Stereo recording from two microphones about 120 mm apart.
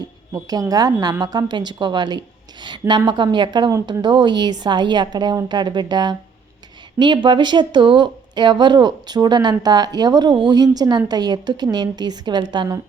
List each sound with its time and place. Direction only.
0.4 s speech: 30° right (ahead or behind)